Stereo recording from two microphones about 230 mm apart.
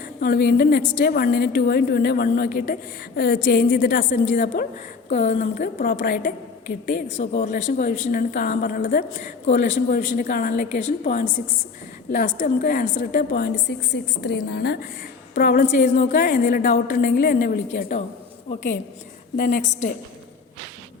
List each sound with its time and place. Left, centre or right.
0.2 s a woman's voice: left
19.4 s a woman's voice: left